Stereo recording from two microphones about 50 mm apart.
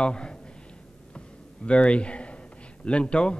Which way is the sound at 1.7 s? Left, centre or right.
Left.